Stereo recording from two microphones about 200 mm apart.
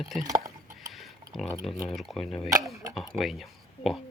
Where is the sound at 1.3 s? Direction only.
10° left (ahead or behind).